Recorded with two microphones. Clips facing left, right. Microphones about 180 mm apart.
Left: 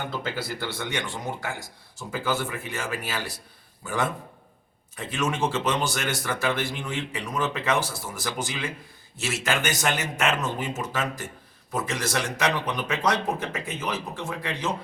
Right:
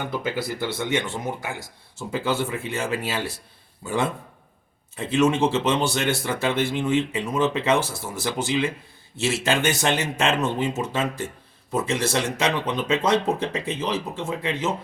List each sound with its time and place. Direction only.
0.1 s speech: 15° right (ahead or behind)